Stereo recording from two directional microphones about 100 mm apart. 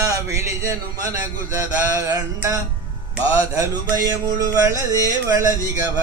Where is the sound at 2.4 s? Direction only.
30° right (ahead or behind).